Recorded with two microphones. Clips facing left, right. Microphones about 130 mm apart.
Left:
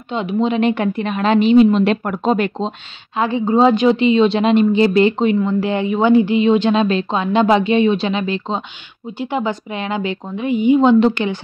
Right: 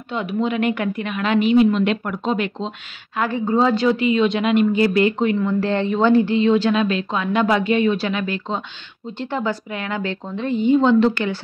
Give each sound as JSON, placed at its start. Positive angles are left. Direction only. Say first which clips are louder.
{"t": 0.1, "sound": "a woman's voice", "louder": "left 4 dB", "side_deg": 20}
{"t": 2.0, "sound": "speech", "louder": "left 5 dB", "side_deg": 45}
{"t": 3.2, "sound": "a woman's voice", "louder": "left 4 dB", "side_deg": 20}